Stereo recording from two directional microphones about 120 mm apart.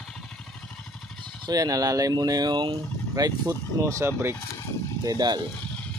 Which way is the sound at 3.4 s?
25° right (ahead or behind).